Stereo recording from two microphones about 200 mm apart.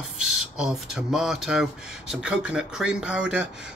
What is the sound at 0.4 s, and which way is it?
Speech, 5° right (ahead or behind).